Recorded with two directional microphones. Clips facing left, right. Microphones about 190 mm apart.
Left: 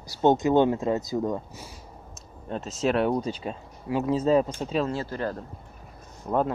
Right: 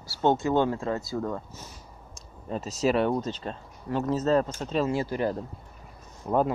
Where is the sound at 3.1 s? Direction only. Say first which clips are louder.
Left 2 dB; 10° left (ahead or behind).